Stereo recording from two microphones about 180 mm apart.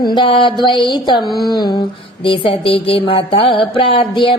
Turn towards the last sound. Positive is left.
turn(degrees=30)  # may be behind; listen again after turning